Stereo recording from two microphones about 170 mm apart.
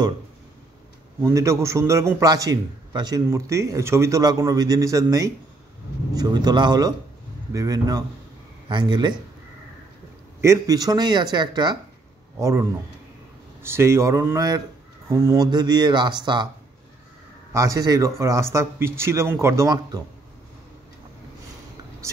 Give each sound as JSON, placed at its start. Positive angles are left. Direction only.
{"t": 1.2, "sound": "a man's voice", "side_deg": -15}
{"t": 10.4, "sound": "a man's voice", "side_deg": -20}
{"t": 17.5, "sound": "speech", "side_deg": -20}